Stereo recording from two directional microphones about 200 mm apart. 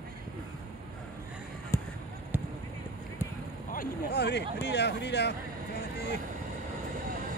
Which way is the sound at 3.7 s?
50° left (ahead or behind).